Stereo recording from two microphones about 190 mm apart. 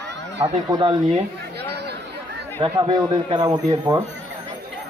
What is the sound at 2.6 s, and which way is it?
Speech, 25° right (ahead or behind).